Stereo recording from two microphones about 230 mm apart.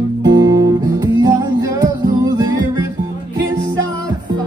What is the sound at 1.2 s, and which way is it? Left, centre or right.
Music, centre.